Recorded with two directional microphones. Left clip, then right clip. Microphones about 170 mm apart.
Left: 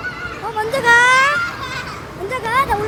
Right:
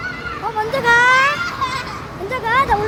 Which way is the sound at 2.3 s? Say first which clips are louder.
Right 1 dB; 5° right (ahead or behind).